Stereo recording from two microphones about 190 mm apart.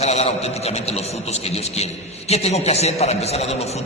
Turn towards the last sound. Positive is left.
turn(degrees=35)  # may be behind; listen again after turning